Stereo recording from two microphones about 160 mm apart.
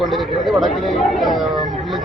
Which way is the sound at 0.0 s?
Centre (ahead or behind).